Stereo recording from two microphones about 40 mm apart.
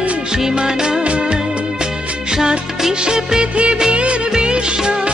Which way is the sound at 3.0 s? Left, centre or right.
Centre.